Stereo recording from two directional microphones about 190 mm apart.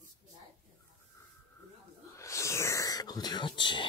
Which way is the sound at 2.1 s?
15° left (ahead or behind).